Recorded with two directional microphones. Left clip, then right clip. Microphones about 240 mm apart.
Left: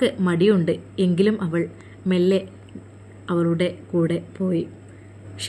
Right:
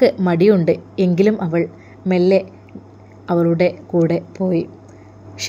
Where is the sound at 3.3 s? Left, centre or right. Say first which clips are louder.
Right 7 dB; centre.